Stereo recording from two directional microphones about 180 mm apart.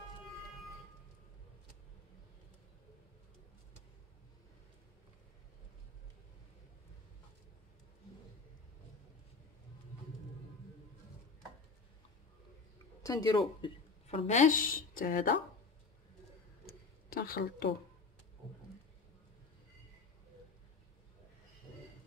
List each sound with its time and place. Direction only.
13.0 s speech: 20° left (ahead or behind)
14.0 s a woman's voice: 35° left (ahead or behind)
16.6 s a sound: 55° left (ahead or behind)